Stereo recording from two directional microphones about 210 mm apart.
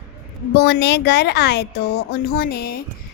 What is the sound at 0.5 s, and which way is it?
Speech, 50° left (ahead or behind).